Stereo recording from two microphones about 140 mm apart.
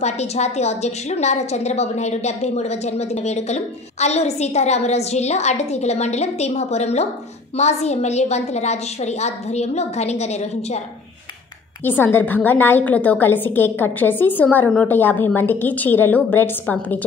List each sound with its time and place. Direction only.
0.0 s a woman's voice: 50° left (ahead or behind)
11.8 s a woman's voice: 15° left (ahead or behind)